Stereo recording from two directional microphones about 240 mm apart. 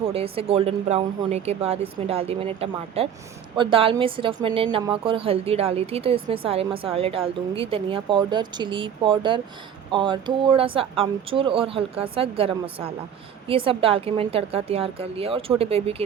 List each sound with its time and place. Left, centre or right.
0.0 s a woman's voice: right